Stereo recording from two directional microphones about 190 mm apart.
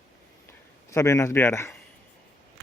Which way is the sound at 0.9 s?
15° left (ahead or behind).